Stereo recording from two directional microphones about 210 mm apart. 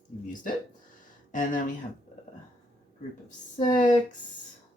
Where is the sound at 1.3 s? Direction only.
40° left (ahead or behind).